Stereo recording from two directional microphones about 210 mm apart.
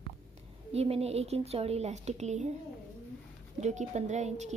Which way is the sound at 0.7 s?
30° right (ahead or behind).